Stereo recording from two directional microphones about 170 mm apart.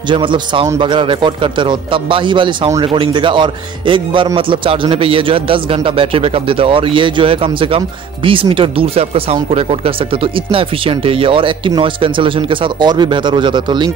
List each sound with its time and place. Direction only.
0.1 s a man's voice: 30° right (ahead or behind)